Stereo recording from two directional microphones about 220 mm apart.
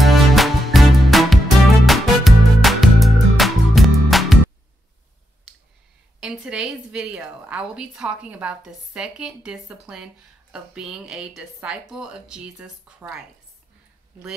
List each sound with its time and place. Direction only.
0.0 s music: centre (ahead or behind)
6.1 s a woman's voice: 5° right (ahead or behind)